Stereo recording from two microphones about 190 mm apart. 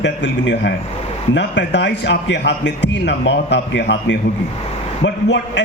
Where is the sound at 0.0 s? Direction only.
70° left (ahead or behind).